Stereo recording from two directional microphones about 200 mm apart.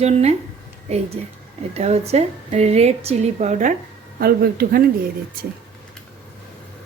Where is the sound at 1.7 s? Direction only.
30° right (ahead or behind).